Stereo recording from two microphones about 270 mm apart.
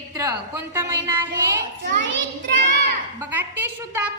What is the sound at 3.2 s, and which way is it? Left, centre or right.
Speech, centre.